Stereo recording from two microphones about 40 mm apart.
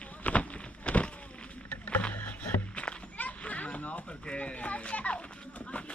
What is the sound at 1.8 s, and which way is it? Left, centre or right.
Rowboat, left.